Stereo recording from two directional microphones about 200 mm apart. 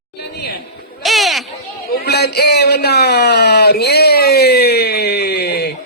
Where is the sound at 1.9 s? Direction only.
55° left (ahead or behind).